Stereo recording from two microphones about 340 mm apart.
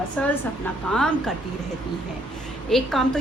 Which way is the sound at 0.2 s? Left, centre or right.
Centre.